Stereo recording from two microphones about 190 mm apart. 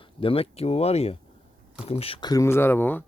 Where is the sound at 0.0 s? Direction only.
30° left (ahead or behind).